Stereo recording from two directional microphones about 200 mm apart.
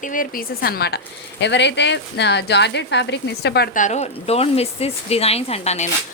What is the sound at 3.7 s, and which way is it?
A woman's voice, 35° left (ahead or behind).